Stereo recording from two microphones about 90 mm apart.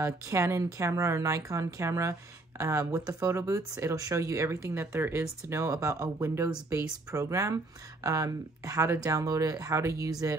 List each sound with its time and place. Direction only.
0.0 s speech: 35° right (ahead or behind)